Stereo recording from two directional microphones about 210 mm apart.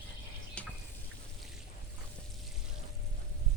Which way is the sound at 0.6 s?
5° left (ahead or behind).